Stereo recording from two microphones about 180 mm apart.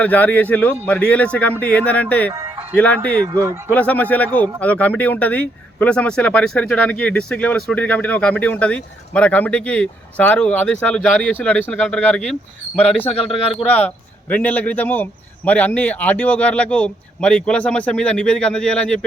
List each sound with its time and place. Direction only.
0.0 s speech: 10° left (ahead or behind)
2.3 s music: 15° right (ahead or behind)
2.7 s speech: 5° left (ahead or behind)
13.1 s a man's voice: 30° left (ahead or behind)
13.7 s speech: 10° left (ahead or behind)